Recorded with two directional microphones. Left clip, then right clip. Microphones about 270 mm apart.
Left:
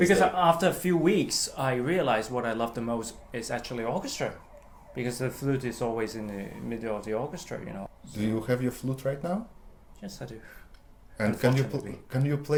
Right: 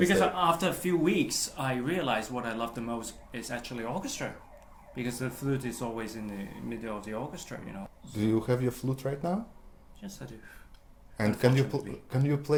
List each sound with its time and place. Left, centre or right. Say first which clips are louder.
0.0 s speech: left 3 dB; left
8.1 s speech: right 1 dB; right
10.0 s speech: left 4 dB; left
11.2 s speech: even; right